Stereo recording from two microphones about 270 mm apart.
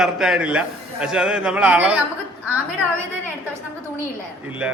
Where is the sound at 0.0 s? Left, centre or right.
Centre.